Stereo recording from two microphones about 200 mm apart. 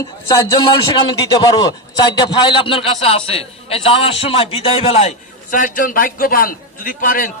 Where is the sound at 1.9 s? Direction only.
20° left (ahead or behind).